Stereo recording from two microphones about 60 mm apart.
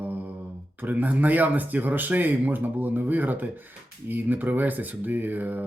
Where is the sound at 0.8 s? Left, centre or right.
Right.